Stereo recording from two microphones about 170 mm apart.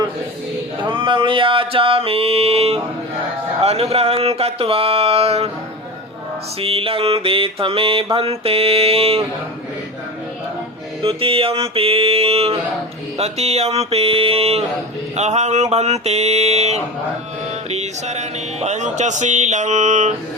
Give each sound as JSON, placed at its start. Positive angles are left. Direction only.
{"t": 0.8, "sound": "mantra", "side_deg": -30}
{"t": 6.6, "sound": "mantra", "side_deg": -35}
{"t": 11.0, "sound": "mantra", "side_deg": -35}
{"t": 17.7, "sound": "speech", "side_deg": -40}